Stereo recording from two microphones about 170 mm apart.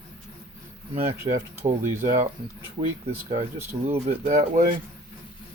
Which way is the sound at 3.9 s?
40° right (ahead or behind).